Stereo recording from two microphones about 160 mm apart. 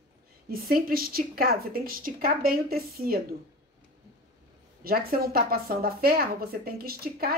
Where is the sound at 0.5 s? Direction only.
65° right (ahead or behind).